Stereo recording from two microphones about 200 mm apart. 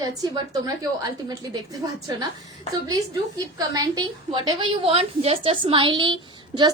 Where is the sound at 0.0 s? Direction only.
20° right (ahead or behind).